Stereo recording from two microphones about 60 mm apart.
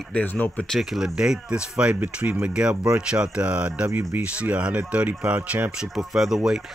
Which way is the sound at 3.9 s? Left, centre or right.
Right.